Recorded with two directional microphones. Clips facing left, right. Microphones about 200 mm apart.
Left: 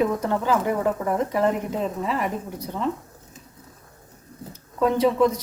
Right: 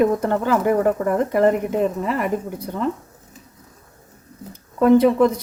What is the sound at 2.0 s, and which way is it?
Speech, 55° right (ahead or behind).